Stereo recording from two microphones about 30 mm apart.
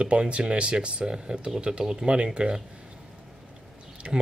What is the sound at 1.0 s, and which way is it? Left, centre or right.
Speech, right.